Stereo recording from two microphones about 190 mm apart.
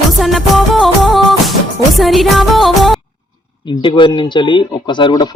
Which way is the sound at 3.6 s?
25° left (ahead or behind).